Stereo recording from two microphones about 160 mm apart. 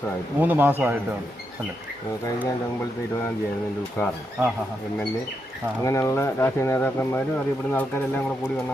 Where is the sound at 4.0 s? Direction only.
15° left (ahead or behind).